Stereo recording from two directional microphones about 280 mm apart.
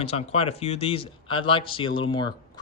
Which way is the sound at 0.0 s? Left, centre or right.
Left.